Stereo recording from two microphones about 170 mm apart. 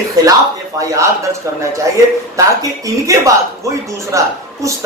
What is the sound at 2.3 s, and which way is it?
Speech, 20° right (ahead or behind).